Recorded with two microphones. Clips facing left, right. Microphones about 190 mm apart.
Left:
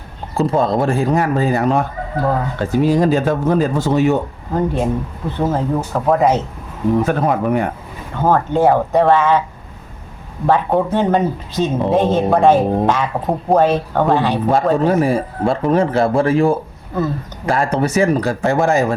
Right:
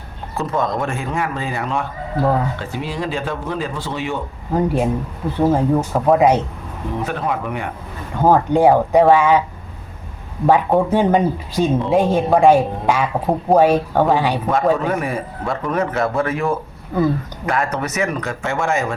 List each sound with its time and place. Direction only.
0.3 s a man's voice: 30° left (ahead or behind)
4.5 s speech: 10° right (ahead or behind)
7.0 s speech: 45° left (ahead or behind)
8.2 s speech: 15° right (ahead or behind)
10.4 s speech: 10° right (ahead or behind)
14.5 s a man's voice: 30° left (ahead or behind)